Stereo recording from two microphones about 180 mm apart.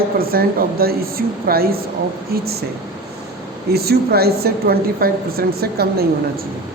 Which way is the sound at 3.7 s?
60° right (ahead or behind).